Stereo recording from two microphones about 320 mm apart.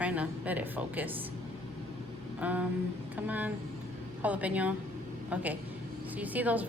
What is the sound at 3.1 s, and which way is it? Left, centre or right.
Speech, centre.